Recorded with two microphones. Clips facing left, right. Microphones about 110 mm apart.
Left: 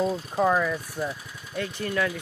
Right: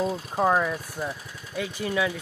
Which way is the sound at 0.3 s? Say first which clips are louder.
Even; 20° right (ahead or behind).